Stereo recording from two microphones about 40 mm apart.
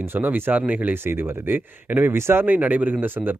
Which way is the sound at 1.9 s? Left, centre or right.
Right.